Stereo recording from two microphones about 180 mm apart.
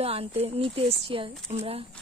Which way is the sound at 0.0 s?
35° right (ahead or behind).